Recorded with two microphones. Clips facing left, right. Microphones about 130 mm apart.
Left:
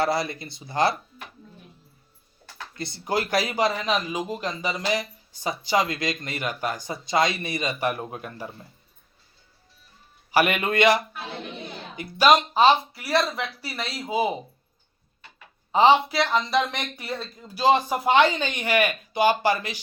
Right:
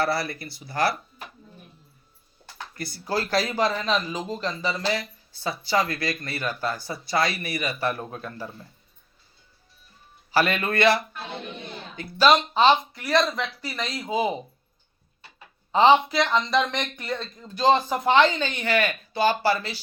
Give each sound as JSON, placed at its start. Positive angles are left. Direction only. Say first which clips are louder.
{"t": 0.0, "sound": "speech", "louder": "left 1 dB", "side_deg": 20}
{"t": 2.7, "sound": "speech", "louder": "left 1 dB", "side_deg": 25}
{"t": 10.3, "sound": "speech", "louder": "left 1 dB", "side_deg": 15}
{"t": 15.7, "sound": "speech", "louder": "even", "side_deg": 5}